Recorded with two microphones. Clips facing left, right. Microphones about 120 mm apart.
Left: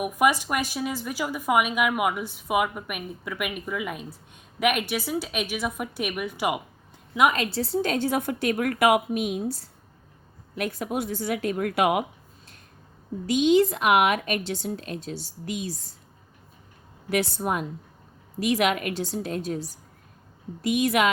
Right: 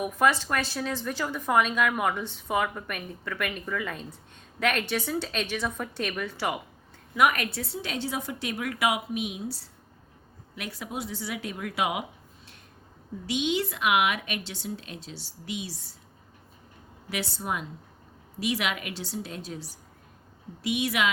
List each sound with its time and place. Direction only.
0.0 s a woman's voice: 15° left (ahead or behind); by 12.0 s 55° left (ahead or behind)
13.2 s a woman's voice: 40° left (ahead or behind)
17.1 s a woman's voice: 50° left (ahead or behind)